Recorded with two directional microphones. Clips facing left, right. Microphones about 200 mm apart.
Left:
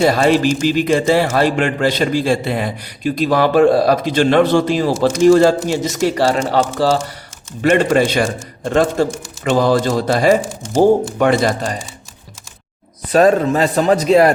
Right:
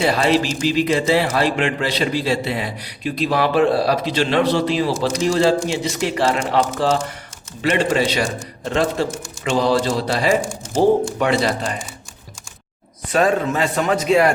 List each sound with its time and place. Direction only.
0.0 s a man's voice: 45° left (ahead or behind)
7.6 s a man's voice: 50° left (ahead or behind)
13.1 s speech: 40° left (ahead or behind)